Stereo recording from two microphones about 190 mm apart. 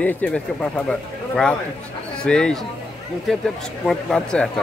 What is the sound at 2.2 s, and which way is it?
Speech, 5° left (ahead or behind).